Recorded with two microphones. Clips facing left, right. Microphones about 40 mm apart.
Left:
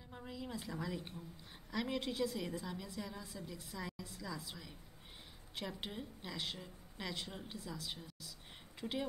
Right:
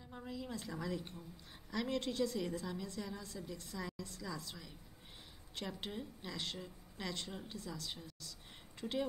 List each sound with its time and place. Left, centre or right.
0.1 s a woman's voice: centre
8.8 s speech: centre